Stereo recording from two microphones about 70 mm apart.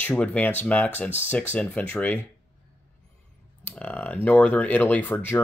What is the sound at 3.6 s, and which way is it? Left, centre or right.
Speech, left.